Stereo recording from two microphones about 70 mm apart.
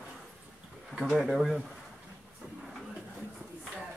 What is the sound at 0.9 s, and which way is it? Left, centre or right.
Speech, centre.